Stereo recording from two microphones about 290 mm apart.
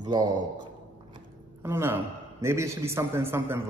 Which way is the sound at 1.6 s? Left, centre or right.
Centre.